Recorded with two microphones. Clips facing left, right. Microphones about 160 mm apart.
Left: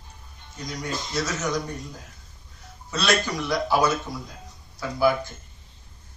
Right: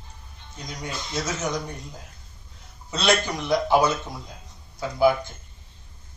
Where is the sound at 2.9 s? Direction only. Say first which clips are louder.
Right 1 dB; 20° right (ahead or behind).